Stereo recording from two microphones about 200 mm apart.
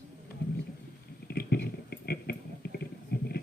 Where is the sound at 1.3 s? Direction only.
50° left (ahead or behind).